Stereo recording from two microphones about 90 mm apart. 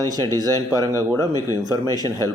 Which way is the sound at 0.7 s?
40° right (ahead or behind).